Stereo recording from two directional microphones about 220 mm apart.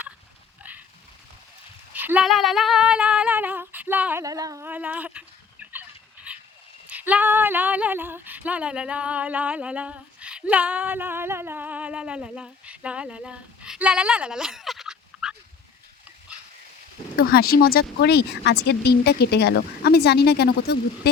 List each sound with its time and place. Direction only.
1.9 s female singing: 5° right (ahead or behind)
6.3 s frog: 5° right (ahead or behind)
6.8 s speech: 5° right (ahead or behind)
17.2 s speech: 45° left (ahead or behind)